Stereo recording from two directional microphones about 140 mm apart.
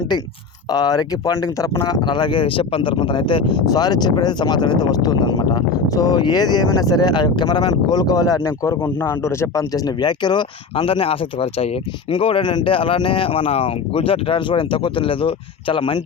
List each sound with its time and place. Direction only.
0.7 s speech: 30° left (ahead or behind)